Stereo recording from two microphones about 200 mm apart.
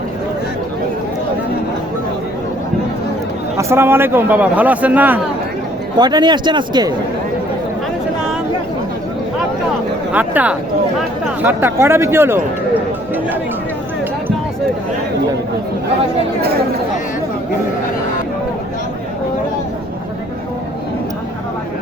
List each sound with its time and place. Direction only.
3.6 s a man's voice: 10° right (ahead or behind)
6.0 s a man's voice: 20° right (ahead or behind)
10.1 s a man's voice: 5° right (ahead or behind)